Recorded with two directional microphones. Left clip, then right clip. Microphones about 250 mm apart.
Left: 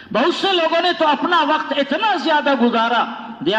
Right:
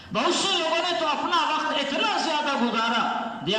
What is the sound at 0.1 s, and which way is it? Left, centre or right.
A man's voice, left.